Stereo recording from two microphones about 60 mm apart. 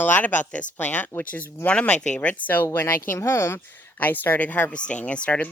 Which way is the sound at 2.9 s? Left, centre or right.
Left.